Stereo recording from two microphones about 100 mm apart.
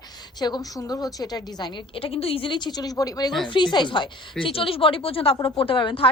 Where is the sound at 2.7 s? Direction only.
40° left (ahead or behind).